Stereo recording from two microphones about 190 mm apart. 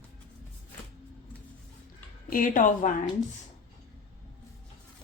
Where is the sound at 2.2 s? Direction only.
45° left (ahead or behind).